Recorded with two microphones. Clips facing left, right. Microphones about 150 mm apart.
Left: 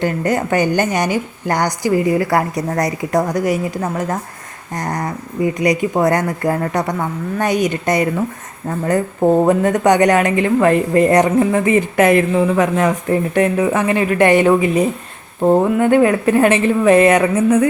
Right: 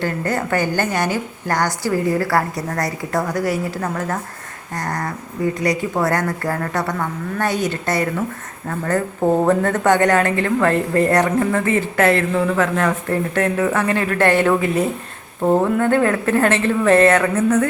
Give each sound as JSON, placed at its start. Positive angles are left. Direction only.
{"t": 0.0, "sound": "a woman's voice", "side_deg": 15}